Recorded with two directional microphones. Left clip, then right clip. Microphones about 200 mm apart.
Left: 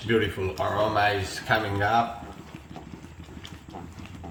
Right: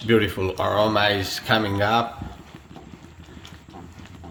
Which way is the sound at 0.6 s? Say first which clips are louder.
Right 4 dB; 50° right (ahead or behind).